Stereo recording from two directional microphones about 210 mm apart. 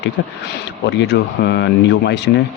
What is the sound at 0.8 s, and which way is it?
Speech, 55° left (ahead or behind).